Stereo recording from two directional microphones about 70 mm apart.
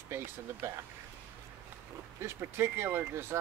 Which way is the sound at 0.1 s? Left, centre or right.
Right.